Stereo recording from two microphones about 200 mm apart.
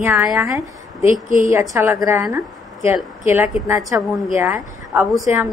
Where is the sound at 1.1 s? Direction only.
40° right (ahead or behind).